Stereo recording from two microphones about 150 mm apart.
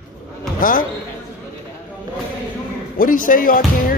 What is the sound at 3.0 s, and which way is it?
Speech, 65° left (ahead or behind).